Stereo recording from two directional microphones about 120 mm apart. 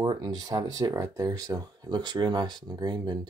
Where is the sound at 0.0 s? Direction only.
35° right (ahead or behind).